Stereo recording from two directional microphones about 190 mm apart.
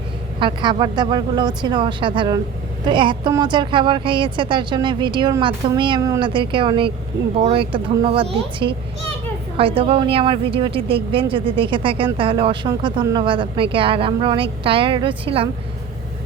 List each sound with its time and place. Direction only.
0.3 s a woman's voice: 25° right (ahead or behind)